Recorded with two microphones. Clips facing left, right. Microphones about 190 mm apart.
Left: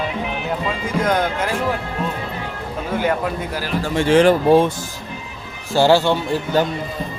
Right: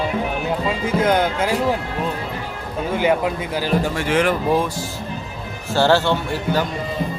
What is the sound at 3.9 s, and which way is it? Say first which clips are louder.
Speech: left 6 dB; 30° left (ahead or behind).